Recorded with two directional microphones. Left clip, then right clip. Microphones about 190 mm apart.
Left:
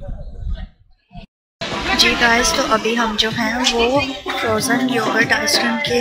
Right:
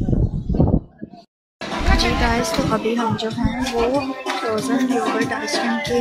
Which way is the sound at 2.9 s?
5° right (ahead or behind).